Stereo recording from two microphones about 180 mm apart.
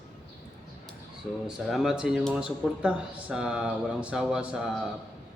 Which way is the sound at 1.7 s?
Centre (ahead or behind).